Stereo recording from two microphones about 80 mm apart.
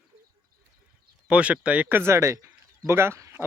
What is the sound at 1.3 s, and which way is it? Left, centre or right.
Speech, centre.